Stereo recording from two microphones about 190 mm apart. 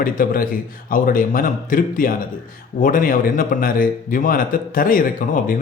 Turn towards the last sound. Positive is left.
turn(degrees=50)  # may be behind; listen again after turning